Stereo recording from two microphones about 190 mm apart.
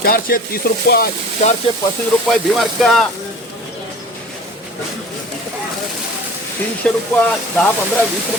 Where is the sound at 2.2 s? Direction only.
Centre (ahead or behind).